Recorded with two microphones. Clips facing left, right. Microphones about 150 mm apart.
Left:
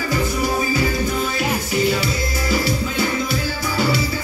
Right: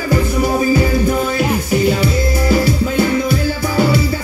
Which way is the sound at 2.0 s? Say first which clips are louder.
Right 7 dB; 50° right (ahead or behind).